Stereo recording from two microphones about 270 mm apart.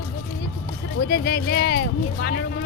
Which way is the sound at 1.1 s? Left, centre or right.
Left.